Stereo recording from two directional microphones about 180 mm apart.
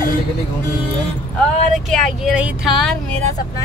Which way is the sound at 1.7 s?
Centre (ahead or behind).